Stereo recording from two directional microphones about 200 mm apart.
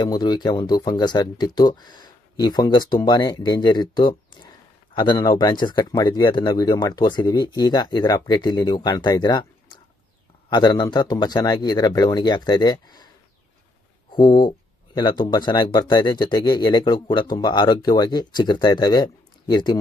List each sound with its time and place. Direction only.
0.0 s speech: 20° left (ahead or behind)
10.5 s speech: 20° left (ahead or behind)
14.1 s speech: 20° left (ahead or behind)